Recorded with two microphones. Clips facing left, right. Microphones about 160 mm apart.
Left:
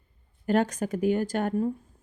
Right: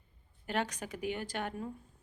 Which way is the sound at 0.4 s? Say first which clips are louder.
Left 11 dB; 45° left (ahead or behind).